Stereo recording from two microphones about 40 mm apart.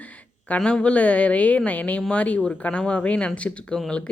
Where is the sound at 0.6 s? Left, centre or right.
Left.